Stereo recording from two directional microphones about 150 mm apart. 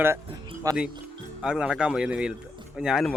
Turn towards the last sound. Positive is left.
turn(degrees=-5)  # may be behind; listen again after turning